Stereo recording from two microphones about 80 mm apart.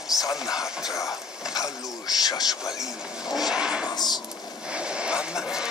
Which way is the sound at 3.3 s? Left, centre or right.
Centre.